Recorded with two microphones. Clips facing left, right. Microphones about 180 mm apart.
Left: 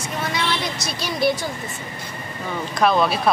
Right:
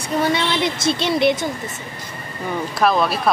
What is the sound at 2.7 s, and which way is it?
Speech, centre (ahead or behind).